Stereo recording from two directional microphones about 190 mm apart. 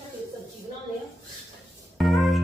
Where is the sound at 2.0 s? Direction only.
Centre (ahead or behind).